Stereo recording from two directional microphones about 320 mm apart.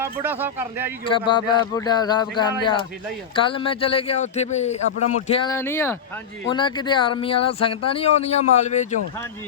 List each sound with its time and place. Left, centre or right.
0.0 s speech: centre
1.3 s speech: centre